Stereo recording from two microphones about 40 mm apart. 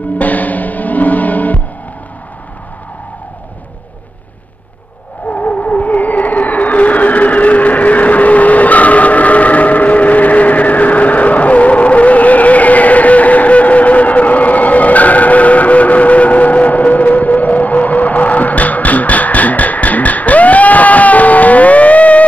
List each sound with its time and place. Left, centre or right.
0.2 s music: left
5.3 s music: left